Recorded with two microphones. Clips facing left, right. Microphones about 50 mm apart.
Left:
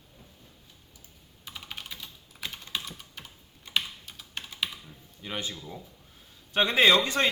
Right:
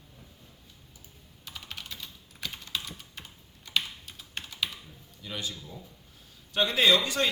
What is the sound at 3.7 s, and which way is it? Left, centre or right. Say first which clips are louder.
Typing: even; left.